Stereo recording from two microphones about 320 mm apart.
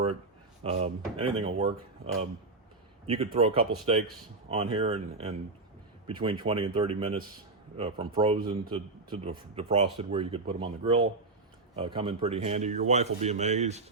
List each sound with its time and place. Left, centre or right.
0.6 s a man's voice: centre
3.1 s a man's voice: centre